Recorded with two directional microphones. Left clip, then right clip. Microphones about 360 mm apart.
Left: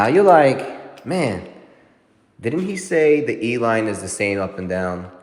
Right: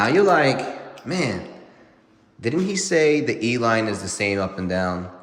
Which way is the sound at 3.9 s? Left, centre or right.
Right.